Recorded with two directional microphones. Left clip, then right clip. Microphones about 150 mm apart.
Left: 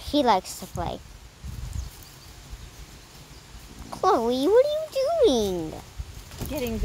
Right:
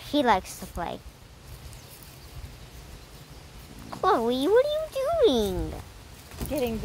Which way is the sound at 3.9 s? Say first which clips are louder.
Left 2 dB; 20° left (ahead or behind).